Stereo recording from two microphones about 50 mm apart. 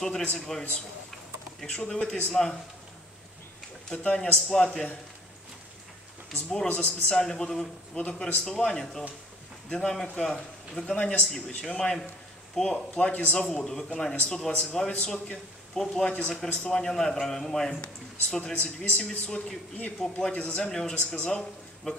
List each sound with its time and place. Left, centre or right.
0.5 s a man's voice: centre; by 2.3 s left
3.9 s a man's voice: left
6.3 s a man's voice: centre
13.1 s speech: left
13.4 s a man's voice: centre